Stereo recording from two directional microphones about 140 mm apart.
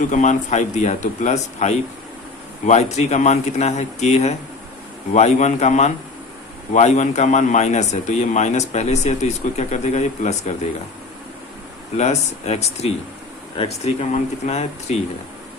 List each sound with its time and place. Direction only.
0.1 s speech: 60° left (ahead or behind)
11.9 s speech: 55° left (ahead or behind)